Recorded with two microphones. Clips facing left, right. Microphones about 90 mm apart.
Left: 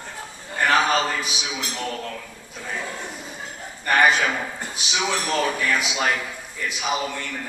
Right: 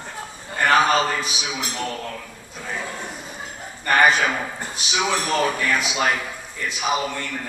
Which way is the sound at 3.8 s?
5° right (ahead or behind).